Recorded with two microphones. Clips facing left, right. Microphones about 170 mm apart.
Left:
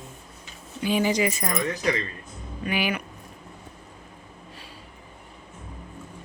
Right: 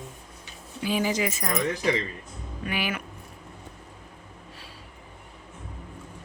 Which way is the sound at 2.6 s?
Centre (ahead or behind).